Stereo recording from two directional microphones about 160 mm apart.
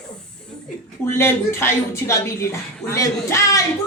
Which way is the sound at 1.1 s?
15° left (ahead or behind).